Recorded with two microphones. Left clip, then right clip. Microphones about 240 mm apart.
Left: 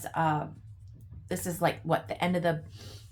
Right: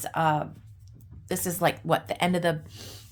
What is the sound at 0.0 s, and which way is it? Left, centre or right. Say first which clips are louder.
Speech: right 4 dB; right.